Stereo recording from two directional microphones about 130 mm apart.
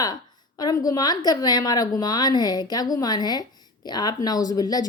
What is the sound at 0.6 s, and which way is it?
A woman's voice, 30° left (ahead or behind).